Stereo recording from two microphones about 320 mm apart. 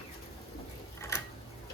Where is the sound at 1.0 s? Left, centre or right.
Centre.